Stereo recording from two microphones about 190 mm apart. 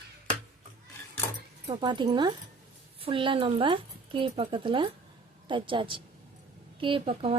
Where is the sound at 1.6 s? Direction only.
25° right (ahead or behind).